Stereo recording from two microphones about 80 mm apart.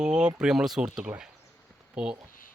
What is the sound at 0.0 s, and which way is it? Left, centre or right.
Speech, centre.